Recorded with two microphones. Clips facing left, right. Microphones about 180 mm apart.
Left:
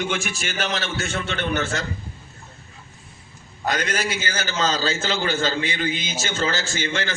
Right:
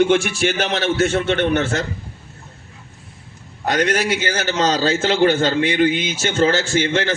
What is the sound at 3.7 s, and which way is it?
A man's voice, 65° right (ahead or behind).